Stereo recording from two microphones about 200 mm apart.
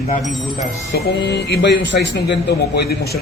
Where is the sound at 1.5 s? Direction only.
55° left (ahead or behind).